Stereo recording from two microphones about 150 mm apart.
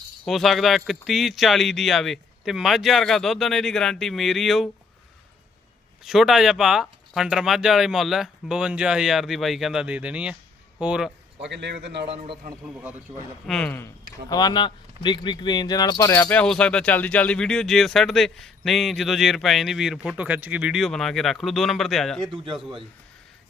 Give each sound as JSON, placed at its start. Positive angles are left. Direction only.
{"t": 0.3, "sound": "speech", "side_deg": 0}
{"t": 6.1, "sound": "speech", "side_deg": 0}
{"t": 12.0, "sound": "a man's voice", "side_deg": -40}
{"t": 12.6, "sound": "a man's voice", "side_deg": -10}
{"t": 13.5, "sound": "a man's voice", "side_deg": 10}
{"t": 16.4, "sound": "speech", "side_deg": 5}